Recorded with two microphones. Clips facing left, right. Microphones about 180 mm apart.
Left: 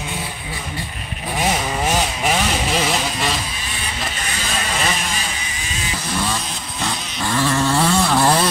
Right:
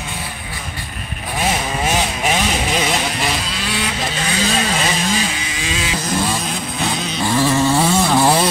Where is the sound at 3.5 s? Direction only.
90° right.